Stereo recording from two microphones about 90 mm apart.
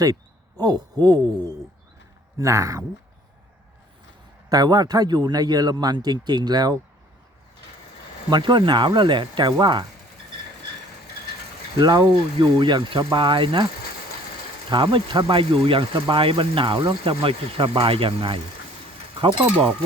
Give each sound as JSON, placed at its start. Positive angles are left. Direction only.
{"t": 0.0, "sound": "speech", "side_deg": -40}
{"t": 2.4, "sound": "speech", "side_deg": -35}
{"t": 4.4, "sound": "a man's voice", "side_deg": -45}
{"t": 8.3, "sound": "speech", "side_deg": -55}
{"t": 11.8, "sound": "speech", "side_deg": -55}
{"t": 14.7, "sound": "speech", "side_deg": -70}
{"t": 17.0, "sound": "speech", "side_deg": -85}
{"t": 19.1, "sound": "speech", "side_deg": -75}